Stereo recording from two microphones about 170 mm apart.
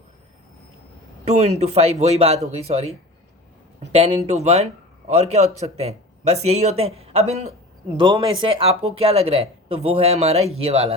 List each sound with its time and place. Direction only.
1.2 s speech: 40° right (ahead or behind)
3.9 s speech: 40° right (ahead or behind)